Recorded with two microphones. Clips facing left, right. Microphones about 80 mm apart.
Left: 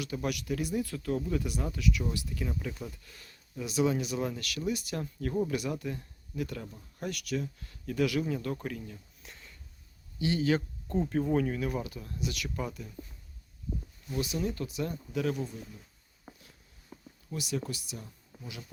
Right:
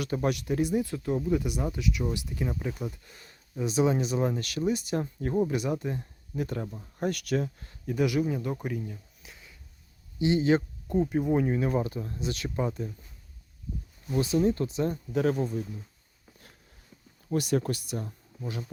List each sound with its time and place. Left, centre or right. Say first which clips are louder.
0.0 s speech: right 5 dB; right
7.1 s speech: right 4 dB; right
7.7 s speech: right 2 dB; right
9.2 s a sound: even; centre
10.2 s speech: right 5 dB; right
10.8 s speech: right 2 dB; centre; by 12.9 s right
14.1 s speech: right 8 dB; right
16.3 s a sound: left 6 dB; left
16.9 s a sound: left 8 dB; left
17.2 s speech: right 8 dB; right